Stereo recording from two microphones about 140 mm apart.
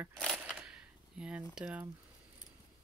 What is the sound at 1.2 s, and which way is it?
Speech, 5° right (ahead or behind).